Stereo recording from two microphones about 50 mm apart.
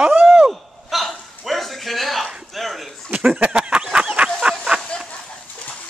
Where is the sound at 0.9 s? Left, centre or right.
Centre.